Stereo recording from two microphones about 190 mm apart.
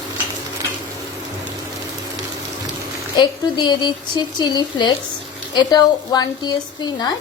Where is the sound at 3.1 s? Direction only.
20° left (ahead or behind).